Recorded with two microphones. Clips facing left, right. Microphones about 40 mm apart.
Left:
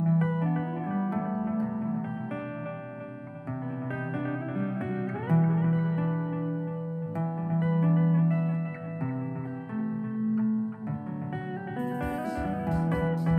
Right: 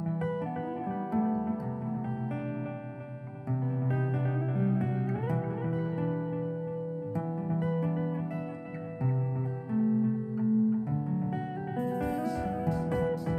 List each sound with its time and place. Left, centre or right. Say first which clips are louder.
0.0 s music: left 5 dB; left
4.3 s music: right 1 dB; left
9.8 s music: right 4 dB; left